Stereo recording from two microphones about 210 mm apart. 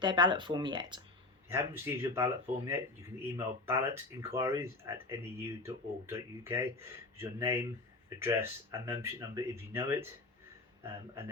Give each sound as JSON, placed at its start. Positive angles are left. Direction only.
{"t": 0.0, "sound": "speech", "side_deg": -20}